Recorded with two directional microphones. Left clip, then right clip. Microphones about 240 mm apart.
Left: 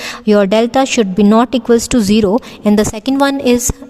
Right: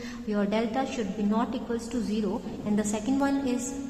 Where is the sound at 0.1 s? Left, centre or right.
Left.